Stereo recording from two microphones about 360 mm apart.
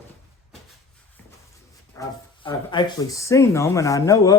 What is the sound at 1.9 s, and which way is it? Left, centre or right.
Music, centre.